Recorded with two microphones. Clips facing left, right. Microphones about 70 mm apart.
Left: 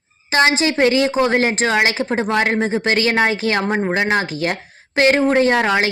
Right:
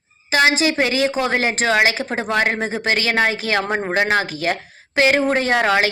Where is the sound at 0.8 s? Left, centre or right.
Left.